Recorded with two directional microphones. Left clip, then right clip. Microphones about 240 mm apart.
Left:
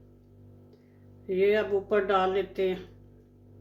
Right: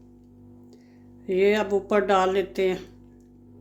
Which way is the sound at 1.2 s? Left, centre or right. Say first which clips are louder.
Right 3 dB; right.